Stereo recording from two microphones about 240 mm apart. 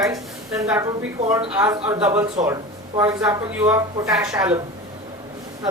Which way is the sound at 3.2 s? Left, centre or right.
Centre.